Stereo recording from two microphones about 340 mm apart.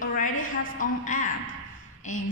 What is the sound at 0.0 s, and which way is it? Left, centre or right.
A woman's voice, left.